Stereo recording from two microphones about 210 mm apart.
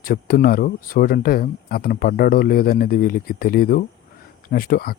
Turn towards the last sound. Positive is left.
turn(degrees=45)  # may be behind; listen again after turning